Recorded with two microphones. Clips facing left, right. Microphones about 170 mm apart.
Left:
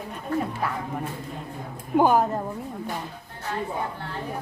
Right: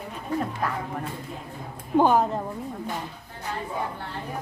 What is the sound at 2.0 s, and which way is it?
Speech, 5° left (ahead or behind).